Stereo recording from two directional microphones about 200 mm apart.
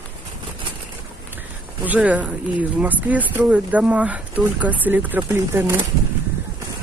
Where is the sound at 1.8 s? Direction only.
10° right (ahead or behind).